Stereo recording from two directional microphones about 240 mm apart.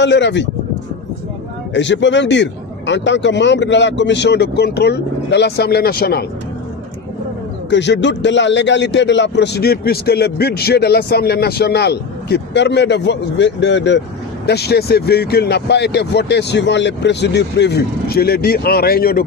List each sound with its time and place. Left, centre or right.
0.0 s a man's voice: left
1.7 s a man's voice: left
7.7 s a man's voice: left